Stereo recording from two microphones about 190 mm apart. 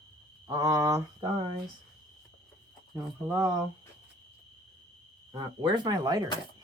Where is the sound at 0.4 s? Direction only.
20° right (ahead or behind).